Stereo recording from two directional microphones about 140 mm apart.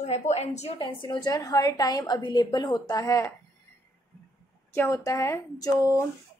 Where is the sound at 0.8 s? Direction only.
35° left (ahead or behind).